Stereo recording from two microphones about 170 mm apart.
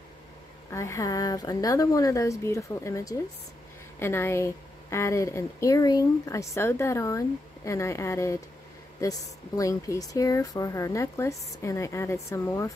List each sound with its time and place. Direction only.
0.7 s speech: 15° left (ahead or behind)
9.6 s speech: 20° left (ahead or behind)